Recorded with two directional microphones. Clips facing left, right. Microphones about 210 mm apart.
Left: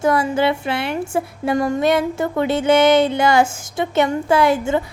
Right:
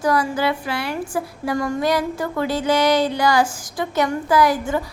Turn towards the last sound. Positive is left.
turn(degrees=25)  # may be behind; listen again after turning